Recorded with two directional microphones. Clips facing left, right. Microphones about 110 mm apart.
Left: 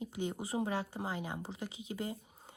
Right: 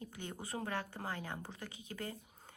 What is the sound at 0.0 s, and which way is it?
Speech, 15° left (ahead or behind).